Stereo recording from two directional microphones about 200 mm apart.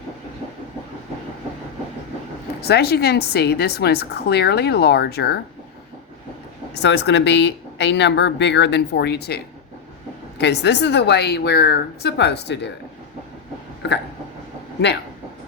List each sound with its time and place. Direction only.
2.6 s a woman's voice: 55° left (ahead or behind)
6.7 s speech: 60° left (ahead or behind)